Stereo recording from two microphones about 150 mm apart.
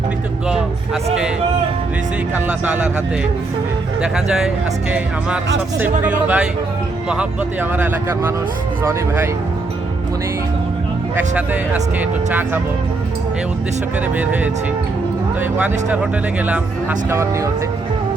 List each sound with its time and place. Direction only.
2.3 s speech: 5° right (ahead or behind)
4.0 s speech: 5° right (ahead or behind)
11.3 s speech: 10° right (ahead or behind)
14.2 s speech: 10° right (ahead or behind)
17.1 s speech: 20° right (ahead or behind)